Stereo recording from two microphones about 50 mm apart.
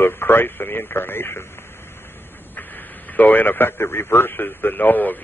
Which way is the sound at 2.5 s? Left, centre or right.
Left.